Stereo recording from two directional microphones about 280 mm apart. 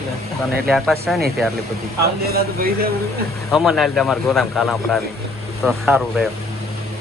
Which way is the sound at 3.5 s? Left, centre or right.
Centre.